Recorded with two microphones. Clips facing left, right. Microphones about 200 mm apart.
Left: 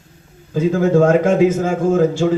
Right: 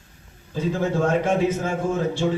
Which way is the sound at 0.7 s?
90° left.